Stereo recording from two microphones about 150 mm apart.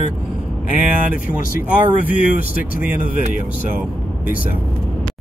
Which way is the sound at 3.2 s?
55° right (ahead or behind).